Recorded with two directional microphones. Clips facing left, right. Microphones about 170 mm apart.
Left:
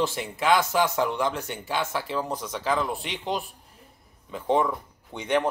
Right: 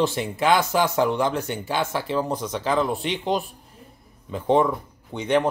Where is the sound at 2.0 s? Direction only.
30° right (ahead or behind).